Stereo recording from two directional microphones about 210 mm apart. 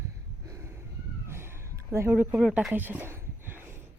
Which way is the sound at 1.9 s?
10° right (ahead or behind).